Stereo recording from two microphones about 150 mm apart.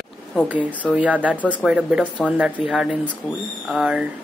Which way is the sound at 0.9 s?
10° right (ahead or behind).